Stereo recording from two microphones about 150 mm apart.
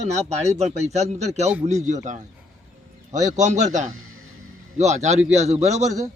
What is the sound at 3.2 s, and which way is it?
A man's voice, 55° right (ahead or behind).